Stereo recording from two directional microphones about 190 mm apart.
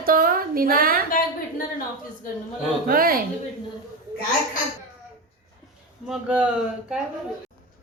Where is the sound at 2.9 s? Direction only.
50° right (ahead or behind).